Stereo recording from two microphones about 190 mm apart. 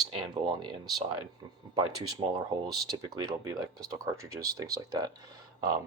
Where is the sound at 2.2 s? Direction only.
30° right (ahead or behind).